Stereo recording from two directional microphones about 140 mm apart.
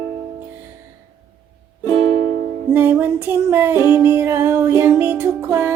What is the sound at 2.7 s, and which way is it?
Music, 15° right (ahead or behind).